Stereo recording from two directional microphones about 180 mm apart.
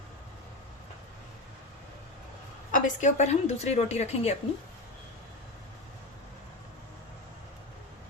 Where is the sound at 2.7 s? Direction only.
45° left (ahead or behind).